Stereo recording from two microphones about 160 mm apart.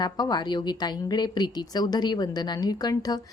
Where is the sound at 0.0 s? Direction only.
25° left (ahead or behind).